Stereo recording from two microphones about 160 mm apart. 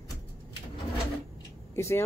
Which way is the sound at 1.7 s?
15° left (ahead or behind).